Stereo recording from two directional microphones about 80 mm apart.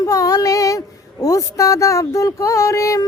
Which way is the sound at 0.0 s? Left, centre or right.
Left.